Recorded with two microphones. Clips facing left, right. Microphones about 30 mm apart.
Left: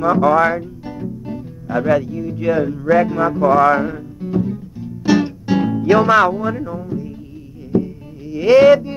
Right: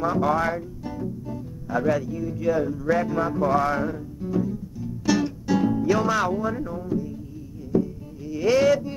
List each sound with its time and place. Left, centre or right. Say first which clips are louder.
0.1 s speech: left 9 dB; left
1.2 s music: left 6 dB; left
2.4 s speech: left 6 dB; left
3.6 s music: left 10 dB; left
7.7 s a sound: left 5 dB; left